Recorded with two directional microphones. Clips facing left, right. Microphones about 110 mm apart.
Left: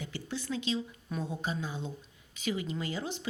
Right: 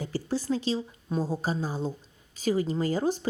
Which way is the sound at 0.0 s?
40° right (ahead or behind).